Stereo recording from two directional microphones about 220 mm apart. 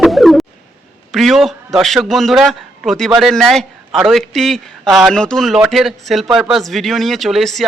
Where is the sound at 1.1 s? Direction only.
Centre (ahead or behind).